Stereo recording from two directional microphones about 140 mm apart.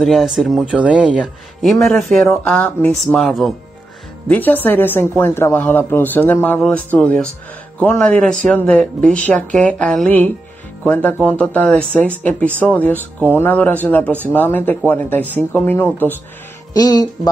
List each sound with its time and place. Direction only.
0.0 s speech: centre (ahead or behind)
4.3 s speech: 15° left (ahead or behind)
16.7 s speech: 30° left (ahead or behind)